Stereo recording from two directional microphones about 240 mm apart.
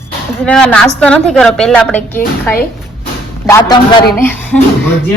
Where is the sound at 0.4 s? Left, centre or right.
Centre.